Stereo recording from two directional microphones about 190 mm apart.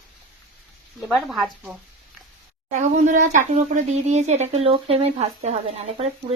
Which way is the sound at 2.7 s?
40° right (ahead or behind).